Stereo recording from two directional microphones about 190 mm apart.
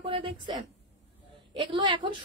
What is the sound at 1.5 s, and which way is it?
Speech, 25° right (ahead or behind).